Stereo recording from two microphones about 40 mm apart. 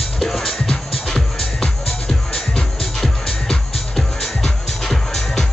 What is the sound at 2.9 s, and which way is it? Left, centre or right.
Music, centre.